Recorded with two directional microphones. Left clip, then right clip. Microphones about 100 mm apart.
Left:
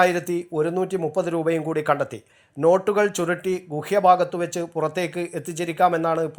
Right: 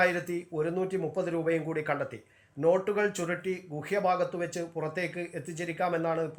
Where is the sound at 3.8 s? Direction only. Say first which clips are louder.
Left 11 dB; 35° left (ahead or behind).